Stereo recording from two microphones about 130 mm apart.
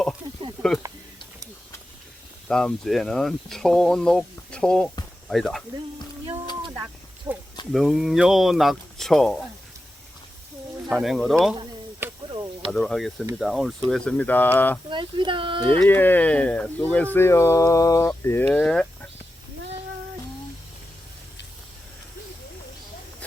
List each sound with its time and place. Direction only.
2.5 s speech: 5° left (ahead or behind)
6.7 s a sound: 15° right (ahead or behind)
7.7 s speech: centre (ahead or behind)
10.8 s speech: centre (ahead or behind)
12.3 s a sound: 35° right (ahead or behind)
12.7 s speech: 5° left (ahead or behind)
14.8 s speech: 35° right (ahead or behind)
15.8 s speech: 15° left (ahead or behind)
18.4 s speech: 5° left (ahead or behind)